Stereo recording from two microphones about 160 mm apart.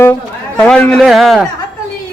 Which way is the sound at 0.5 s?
5° left (ahead or behind).